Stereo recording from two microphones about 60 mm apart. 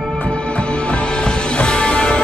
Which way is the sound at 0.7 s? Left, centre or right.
Centre.